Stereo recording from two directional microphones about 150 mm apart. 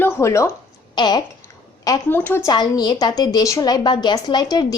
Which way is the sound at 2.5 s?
25° left (ahead or behind).